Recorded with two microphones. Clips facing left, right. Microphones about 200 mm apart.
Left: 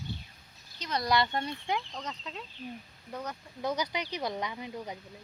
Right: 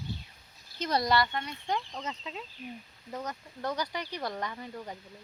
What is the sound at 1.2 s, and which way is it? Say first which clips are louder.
Speech: left 1 dB; 30° left (ahead or behind).